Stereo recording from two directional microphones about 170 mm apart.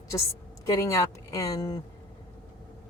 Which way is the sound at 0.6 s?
20° left (ahead or behind).